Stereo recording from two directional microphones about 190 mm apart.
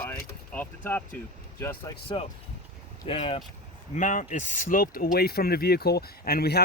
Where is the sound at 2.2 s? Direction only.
25° left (ahead or behind).